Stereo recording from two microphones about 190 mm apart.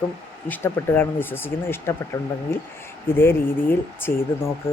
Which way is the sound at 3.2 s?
10° left (ahead or behind).